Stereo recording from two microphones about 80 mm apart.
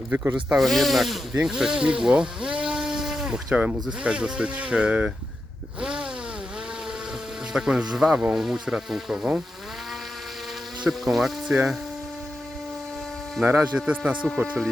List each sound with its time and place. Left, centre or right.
0.5 s speech: centre
1.3 s speech: centre
5.8 s a sound: centre
7.5 s speech: centre
10.8 s speech: centre
13.4 s speech: right
13.7 s speech: centre